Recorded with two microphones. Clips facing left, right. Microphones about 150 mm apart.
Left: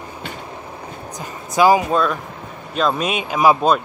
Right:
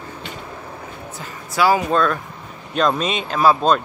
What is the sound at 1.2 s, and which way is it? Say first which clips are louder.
A man's voice: left 4 dB; 15° left (ahead or behind).